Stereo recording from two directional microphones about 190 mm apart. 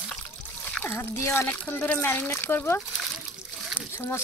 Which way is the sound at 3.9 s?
10° left (ahead or behind).